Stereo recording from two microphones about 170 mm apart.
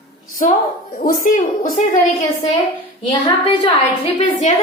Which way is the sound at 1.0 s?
55° left (ahead or behind).